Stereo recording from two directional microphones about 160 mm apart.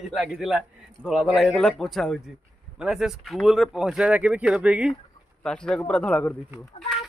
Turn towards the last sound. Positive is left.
turn(degrees=0)  # may be behind; listen again after turning